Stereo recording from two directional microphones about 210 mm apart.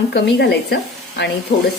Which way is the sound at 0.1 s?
55° left (ahead or behind).